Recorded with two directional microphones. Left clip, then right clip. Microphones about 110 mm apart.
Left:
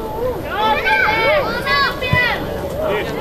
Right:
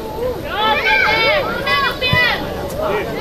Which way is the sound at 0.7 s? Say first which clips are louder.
Right 1 dB; 15° right (ahead or behind).